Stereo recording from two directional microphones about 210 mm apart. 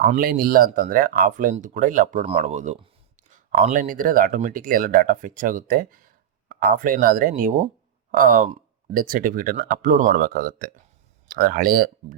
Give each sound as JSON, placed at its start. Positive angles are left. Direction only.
{"t": 0.1, "sound": "speech", "side_deg": -45}